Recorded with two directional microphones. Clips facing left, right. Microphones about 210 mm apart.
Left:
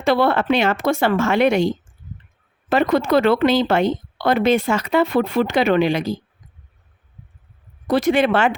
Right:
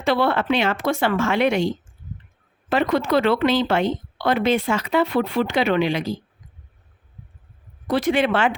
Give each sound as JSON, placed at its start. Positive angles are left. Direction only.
{"t": 0.0, "sound": "speech", "side_deg": 45}
{"t": 2.6, "sound": "speech", "side_deg": 45}
{"t": 7.9, "sound": "speech", "side_deg": 40}